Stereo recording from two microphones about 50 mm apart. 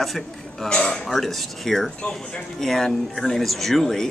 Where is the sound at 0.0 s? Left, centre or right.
Centre.